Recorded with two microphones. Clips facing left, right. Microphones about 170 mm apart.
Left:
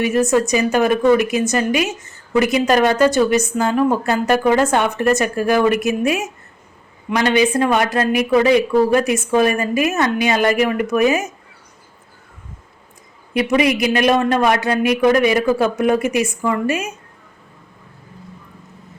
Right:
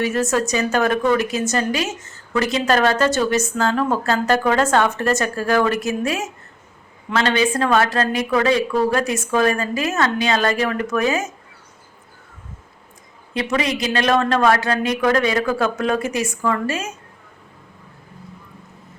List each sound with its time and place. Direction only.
0.0 s speech: 15° left (ahead or behind)
13.4 s speech: 15° left (ahead or behind)